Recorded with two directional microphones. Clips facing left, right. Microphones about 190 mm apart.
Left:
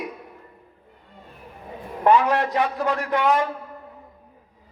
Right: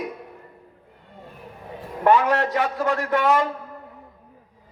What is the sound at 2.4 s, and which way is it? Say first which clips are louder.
Speech: even; 15° left (ahead or behind).